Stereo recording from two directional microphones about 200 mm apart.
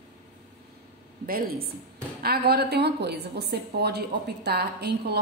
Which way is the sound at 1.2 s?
50° right (ahead or behind).